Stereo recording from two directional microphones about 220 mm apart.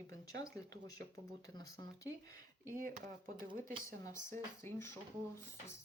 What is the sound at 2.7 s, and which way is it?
Speech, 40° right (ahead or behind).